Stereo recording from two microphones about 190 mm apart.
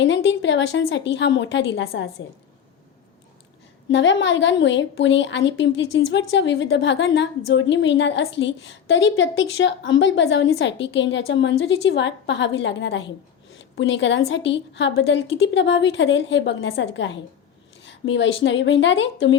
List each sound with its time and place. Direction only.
0.0 s a woman's voice: 70° left (ahead or behind)
3.8 s a woman's voice: 75° left (ahead or behind)